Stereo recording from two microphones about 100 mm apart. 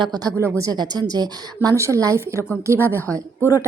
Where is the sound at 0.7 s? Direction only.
40° right (ahead or behind).